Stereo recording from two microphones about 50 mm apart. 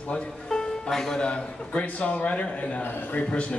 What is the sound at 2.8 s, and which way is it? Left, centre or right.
Speech, left.